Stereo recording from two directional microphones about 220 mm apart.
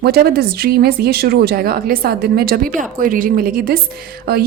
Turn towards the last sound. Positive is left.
turn(degrees=-45)  # may be behind; listen again after turning